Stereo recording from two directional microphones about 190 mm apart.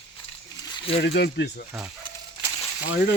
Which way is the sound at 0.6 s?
25° left (ahead or behind).